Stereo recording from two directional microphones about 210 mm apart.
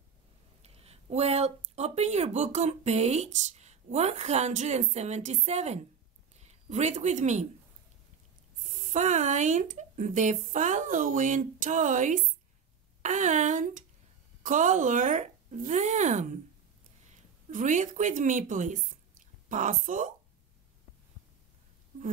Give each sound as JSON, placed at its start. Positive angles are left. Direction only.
{"t": 0.6, "sound": "speech", "side_deg": -30}
{"t": 8.5, "sound": "speech", "side_deg": -35}
{"t": 17.5, "sound": "speech", "side_deg": -35}